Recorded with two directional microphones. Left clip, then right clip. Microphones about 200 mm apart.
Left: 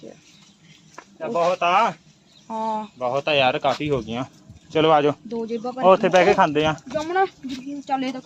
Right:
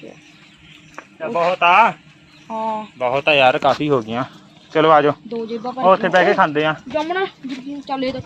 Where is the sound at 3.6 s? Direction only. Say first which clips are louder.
Right 6 dB; 20° right (ahead or behind).